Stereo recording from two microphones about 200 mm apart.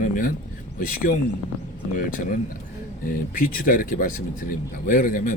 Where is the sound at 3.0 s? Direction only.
45° left (ahead or behind).